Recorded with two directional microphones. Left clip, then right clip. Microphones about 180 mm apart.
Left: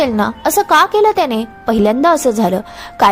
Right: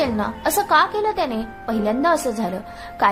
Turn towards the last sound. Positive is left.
turn(degrees=40)  # may be behind; listen again after turning